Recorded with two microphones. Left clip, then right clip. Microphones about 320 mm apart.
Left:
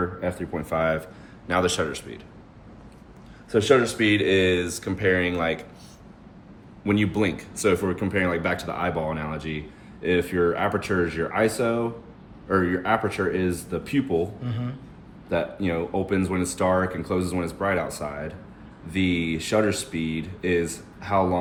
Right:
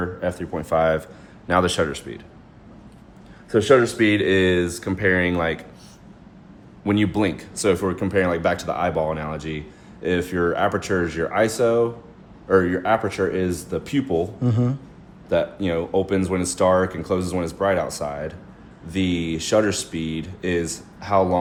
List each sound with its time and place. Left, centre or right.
0.2 s speech: centre
3.5 s speech: right
6.8 s speech: right
15.3 s speech: centre